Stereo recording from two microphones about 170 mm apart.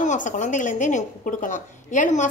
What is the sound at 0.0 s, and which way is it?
A woman's voice, 45° left (ahead or behind).